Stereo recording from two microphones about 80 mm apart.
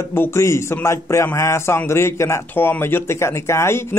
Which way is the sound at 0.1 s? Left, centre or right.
Left.